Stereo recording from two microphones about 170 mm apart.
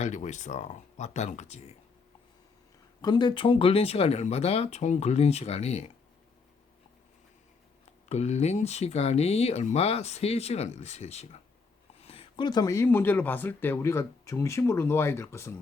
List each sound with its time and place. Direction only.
0.0 s speech: 45° left (ahead or behind)
3.0 s speech: 25° left (ahead or behind)
8.1 s speech: 40° left (ahead or behind); by 15.5 s 15° left (ahead or behind)